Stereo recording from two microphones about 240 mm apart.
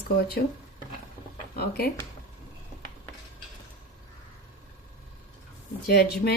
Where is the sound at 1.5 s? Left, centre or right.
Left.